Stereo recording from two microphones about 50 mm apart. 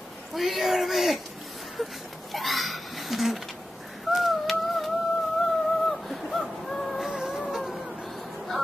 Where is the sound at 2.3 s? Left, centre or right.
Centre.